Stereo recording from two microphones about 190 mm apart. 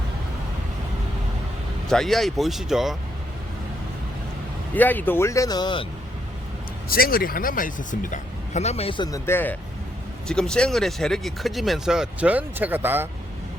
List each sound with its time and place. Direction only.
1.9 s speech: centre (ahead or behind)
4.7 s speech: 10° left (ahead or behind)
6.8 s a man's voice: 50° left (ahead or behind); by 13.1 s 10° right (ahead or behind)